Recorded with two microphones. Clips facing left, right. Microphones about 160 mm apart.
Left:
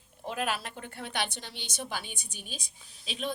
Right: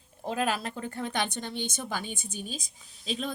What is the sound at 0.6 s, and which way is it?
A woman's voice, 40° right (ahead or behind).